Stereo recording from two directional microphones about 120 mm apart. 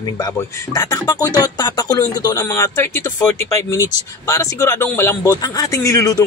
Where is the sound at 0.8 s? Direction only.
30° left (ahead or behind).